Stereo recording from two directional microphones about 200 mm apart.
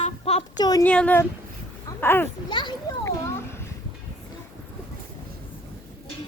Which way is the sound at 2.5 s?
20° left (ahead or behind).